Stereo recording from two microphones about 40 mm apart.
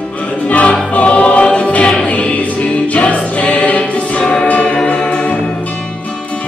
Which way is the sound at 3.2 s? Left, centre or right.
Left.